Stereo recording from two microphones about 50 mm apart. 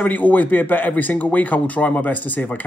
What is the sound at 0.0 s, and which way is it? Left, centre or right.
Speech, left.